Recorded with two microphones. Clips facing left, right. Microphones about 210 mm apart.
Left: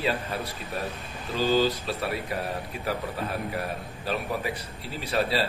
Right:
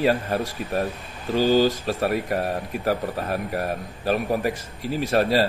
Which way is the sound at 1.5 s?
45° right (ahead or behind).